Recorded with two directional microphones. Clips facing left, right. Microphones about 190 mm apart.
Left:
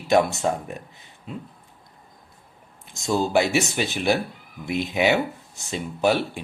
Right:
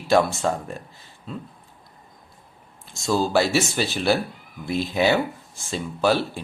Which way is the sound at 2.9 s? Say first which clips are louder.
Even; 20° left (ahead or behind).